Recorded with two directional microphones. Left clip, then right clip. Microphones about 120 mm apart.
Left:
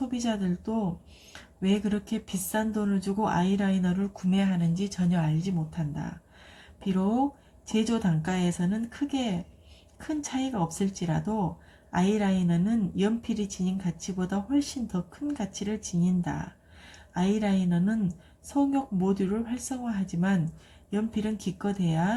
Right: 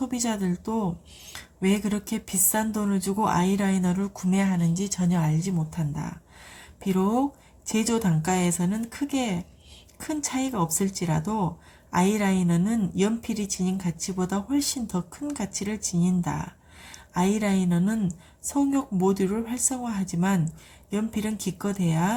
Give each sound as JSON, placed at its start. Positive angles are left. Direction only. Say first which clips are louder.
{"t": 0.1, "sound": "a woman's voice", "louder": "right 2 dB", "side_deg": -35}
{"t": 7.7, "sound": "a woman's voice", "louder": "right 3 dB", "side_deg": -30}